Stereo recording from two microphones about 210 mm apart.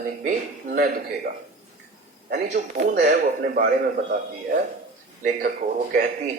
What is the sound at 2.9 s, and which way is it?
Speech, 35° right (ahead or behind).